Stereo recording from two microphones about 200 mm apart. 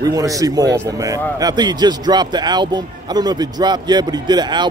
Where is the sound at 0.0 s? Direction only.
20° right (ahead or behind).